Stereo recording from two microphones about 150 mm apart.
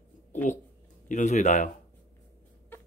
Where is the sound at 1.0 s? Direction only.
55° left (ahead or behind).